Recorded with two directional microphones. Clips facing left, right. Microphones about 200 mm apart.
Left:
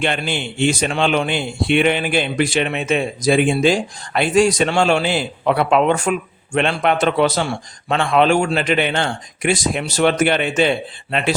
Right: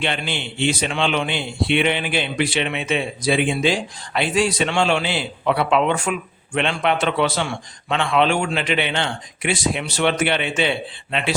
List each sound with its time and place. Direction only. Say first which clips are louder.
0.0 s a man's voice: left 4 dB; 45° left (ahead or behind)